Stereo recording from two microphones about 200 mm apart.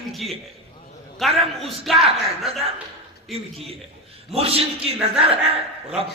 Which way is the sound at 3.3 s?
30° right (ahead or behind).